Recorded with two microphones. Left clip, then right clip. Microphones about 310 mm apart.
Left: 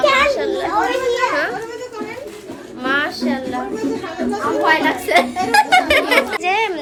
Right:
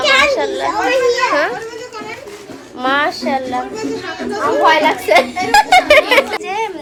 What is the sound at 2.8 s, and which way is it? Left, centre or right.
Speech, centre.